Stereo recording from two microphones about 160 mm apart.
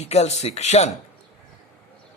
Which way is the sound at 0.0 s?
40° left (ahead or behind).